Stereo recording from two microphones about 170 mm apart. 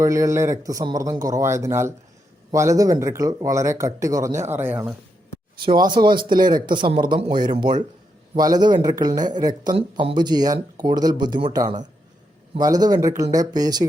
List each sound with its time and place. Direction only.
0.0 s speech: 20° right (ahead or behind)
5.6 s speech: 25° right (ahead or behind)